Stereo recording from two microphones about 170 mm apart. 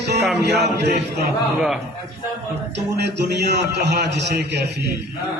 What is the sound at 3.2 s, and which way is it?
A man's voice, 80° right.